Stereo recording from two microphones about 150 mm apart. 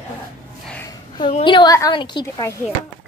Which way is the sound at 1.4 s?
30° left (ahead or behind).